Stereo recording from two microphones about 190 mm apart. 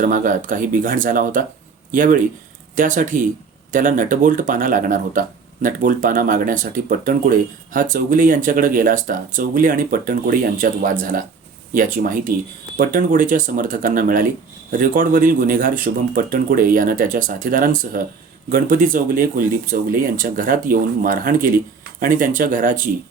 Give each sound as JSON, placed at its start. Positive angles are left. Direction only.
{"t": 0.0, "sound": "speech", "side_deg": -45}